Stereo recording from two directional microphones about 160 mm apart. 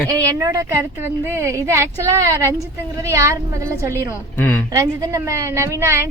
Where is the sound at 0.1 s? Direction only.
20° right (ahead or behind).